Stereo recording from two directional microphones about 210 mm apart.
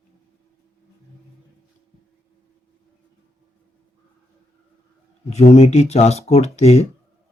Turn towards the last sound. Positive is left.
turn(degrees=30)  # may be behind; listen again after turning